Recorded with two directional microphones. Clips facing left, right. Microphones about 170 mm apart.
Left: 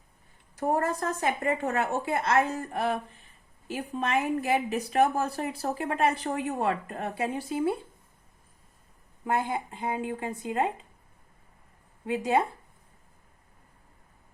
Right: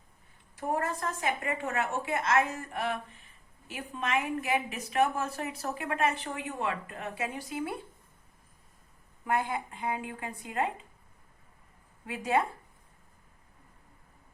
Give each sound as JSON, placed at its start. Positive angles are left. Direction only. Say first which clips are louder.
{"t": 0.5, "sound": "speech", "louder": "left 5 dB", "side_deg": 40}
{"t": 9.2, "sound": "a woman's voice", "louder": "left 2 dB", "side_deg": 25}
{"t": 12.0, "sound": "a woman's voice", "louder": "left 3 dB", "side_deg": 25}